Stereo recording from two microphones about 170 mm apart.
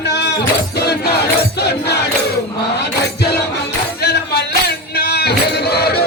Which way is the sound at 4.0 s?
75° left (ahead or behind).